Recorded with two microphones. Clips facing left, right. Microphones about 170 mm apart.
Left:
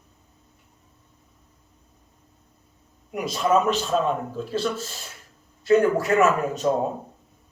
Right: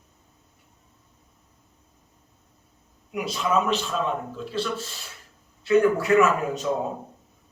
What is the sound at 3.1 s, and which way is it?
A man's voice, 45° left (ahead or behind).